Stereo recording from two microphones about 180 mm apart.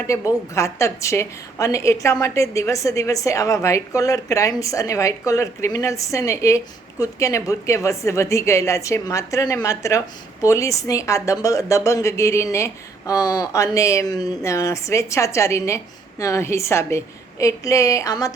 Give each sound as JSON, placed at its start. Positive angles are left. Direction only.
{"t": 0.1, "sound": "a woman's voice", "side_deg": 15}